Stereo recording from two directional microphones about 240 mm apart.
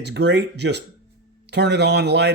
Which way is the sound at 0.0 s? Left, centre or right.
Right.